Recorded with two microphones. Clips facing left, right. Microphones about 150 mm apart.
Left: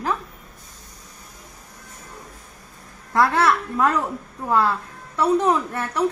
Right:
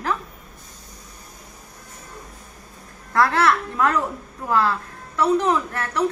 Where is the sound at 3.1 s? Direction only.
25° left (ahead or behind).